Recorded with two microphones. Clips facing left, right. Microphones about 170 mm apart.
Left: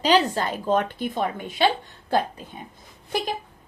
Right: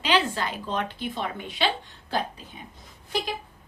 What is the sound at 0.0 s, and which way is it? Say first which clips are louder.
A woman's voice: left 5 dB; 40° left (ahead or behind).